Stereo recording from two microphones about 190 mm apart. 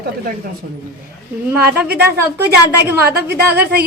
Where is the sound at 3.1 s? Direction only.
55° right (ahead or behind).